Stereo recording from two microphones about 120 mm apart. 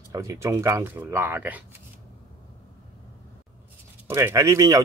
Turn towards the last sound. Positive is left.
turn(degrees=-30)  # may be behind; listen again after turning